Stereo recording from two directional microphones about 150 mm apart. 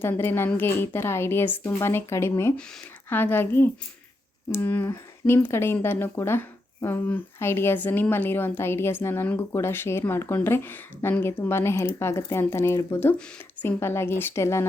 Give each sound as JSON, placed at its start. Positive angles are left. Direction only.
{"t": 0.0, "sound": "a woman's voice", "side_deg": 15}